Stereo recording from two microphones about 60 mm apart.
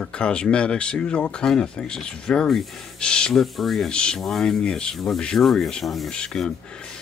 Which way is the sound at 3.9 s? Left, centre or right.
Centre.